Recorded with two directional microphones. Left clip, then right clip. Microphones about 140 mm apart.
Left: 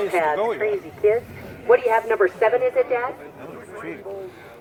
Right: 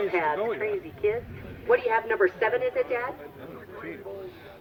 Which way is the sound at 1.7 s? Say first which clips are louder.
Left 6 dB; 45° right (ahead or behind).